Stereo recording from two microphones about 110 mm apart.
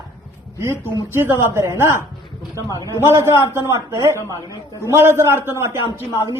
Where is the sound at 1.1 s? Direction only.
20° right (ahead or behind).